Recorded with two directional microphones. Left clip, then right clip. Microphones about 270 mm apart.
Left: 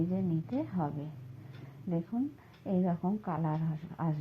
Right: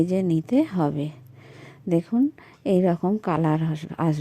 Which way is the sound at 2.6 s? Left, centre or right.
Right.